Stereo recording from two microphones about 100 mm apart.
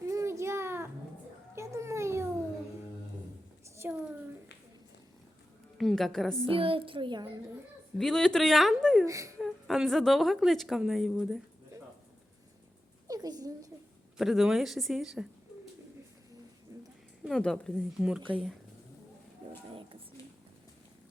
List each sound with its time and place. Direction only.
0.0 s a sound: 30° right (ahead or behind)
1.5 s children playing: 30° right (ahead or behind)
3.8 s a sound: 20° right (ahead or behind)
5.7 s a woman's voice: centre (ahead or behind)
6.5 s a child's voice: 65° right (ahead or behind); by 7.4 s 40° right (ahead or behind)
7.9 s a woman's voice: 5° left (ahead or behind)
9.0 s speech: 30° right (ahead or behind)
9.4 s a woman's voice: centre (ahead or behind)
13.1 s a sound: 40° right (ahead or behind)
14.2 s a woman's voice: centre (ahead or behind)
16.7 s a sound: 30° right (ahead or behind)
17.2 s a woman's voice: 5° left (ahead or behind)